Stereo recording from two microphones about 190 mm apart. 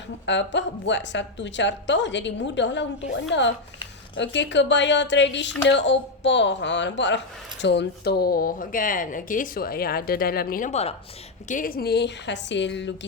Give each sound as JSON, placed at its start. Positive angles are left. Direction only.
{"t": 0.3, "sound": "a woman's voice", "side_deg": 70}
{"t": 11.4, "sound": "a woman's voice", "side_deg": 45}